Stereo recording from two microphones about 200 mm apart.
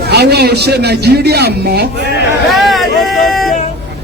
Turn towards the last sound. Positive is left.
turn(degrees=0)  # may be behind; listen again after turning